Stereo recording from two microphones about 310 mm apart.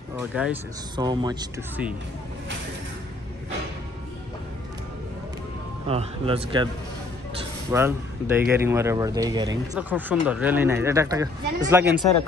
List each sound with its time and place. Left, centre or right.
0.2 s speech: centre
5.9 s speech: centre
7.7 s speech: centre